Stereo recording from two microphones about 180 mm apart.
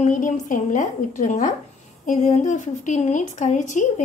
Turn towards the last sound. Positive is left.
turn(degrees=45)  # may be behind; listen again after turning